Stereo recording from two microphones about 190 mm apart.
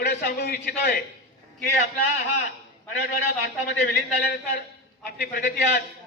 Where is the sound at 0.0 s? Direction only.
60° left (ahead or behind).